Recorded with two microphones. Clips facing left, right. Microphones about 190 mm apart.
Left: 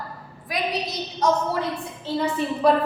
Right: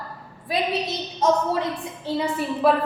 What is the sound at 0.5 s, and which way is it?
A woman's voice, 25° right (ahead or behind).